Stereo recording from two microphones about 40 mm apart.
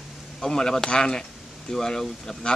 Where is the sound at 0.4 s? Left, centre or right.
Centre.